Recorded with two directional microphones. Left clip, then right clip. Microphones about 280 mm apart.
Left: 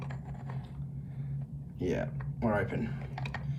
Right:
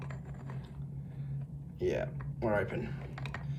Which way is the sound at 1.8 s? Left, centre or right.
Centre.